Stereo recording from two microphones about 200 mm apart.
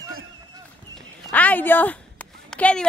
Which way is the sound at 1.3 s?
10° left (ahead or behind).